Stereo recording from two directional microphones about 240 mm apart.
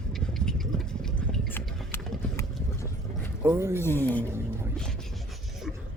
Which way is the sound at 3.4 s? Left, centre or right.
Centre.